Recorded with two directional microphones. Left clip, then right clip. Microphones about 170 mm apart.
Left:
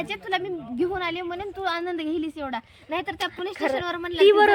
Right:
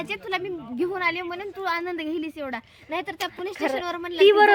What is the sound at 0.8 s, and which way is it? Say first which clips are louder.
Speech: right 2 dB; 10° right (ahead or behind).